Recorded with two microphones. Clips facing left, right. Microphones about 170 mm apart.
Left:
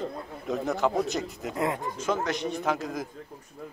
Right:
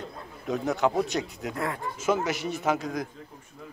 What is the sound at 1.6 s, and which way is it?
Speech, 20° left (ahead or behind).